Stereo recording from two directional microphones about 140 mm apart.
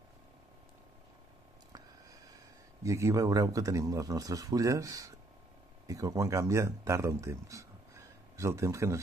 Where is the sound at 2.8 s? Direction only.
20° right (ahead or behind).